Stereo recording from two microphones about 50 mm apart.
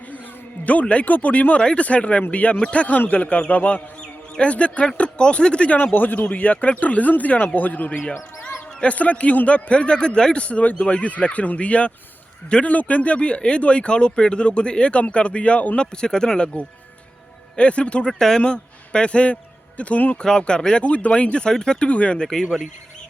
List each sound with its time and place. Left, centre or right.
0.6 s speech: left
5.7 s speech: left
16.0 s speech: centre
17.6 s speech: left
18.1 s a man's voice: centre; by 20.1 s left
20.2 s speech: centre